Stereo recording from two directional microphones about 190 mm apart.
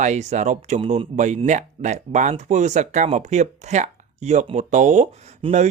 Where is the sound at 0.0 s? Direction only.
35° right (ahead or behind).